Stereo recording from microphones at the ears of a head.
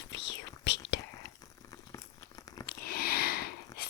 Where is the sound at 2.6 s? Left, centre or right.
Left.